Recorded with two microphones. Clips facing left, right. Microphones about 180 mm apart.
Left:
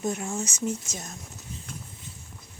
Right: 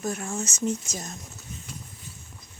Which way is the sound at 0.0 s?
20° left (ahead or behind).